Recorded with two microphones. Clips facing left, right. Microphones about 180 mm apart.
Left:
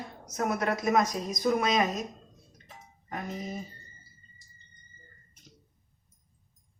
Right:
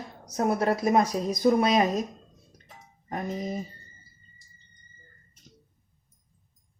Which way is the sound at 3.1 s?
40° right (ahead or behind).